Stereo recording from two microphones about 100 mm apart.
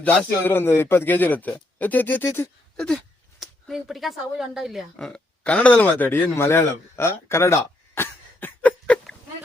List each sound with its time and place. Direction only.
0.0 s a man's voice: 15° left (ahead or behind)
2.7 s a sound: 5° left (ahead or behind)
3.4 s speech: centre (ahead or behind); by 9.0 s 20° left (ahead or behind)